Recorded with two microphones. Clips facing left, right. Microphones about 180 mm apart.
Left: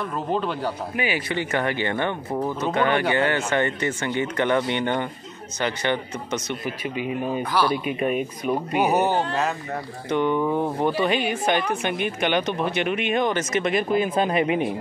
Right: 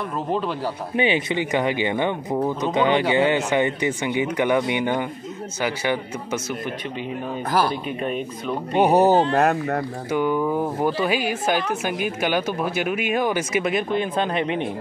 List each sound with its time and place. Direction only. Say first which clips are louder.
0.3 s a woman's voice: even; centre (ahead or behind)
0.9 s speech: right 7 dB; 25° right (ahead or behind); by 6.4 s 5° right (ahead or behind)
6.6 s speech: left 1 dB; 10° left (ahead or behind)
8.9 s speech: right 8 dB; 35° right (ahead or behind)
9.3 s speech: right 6 dB; 60° right (ahead or behind)
10.0 s a woman's voice: left 1 dB; 5° right (ahead or behind)